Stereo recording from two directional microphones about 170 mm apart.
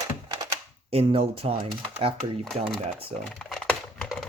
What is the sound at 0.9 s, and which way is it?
Speech, 35° right (ahead or behind).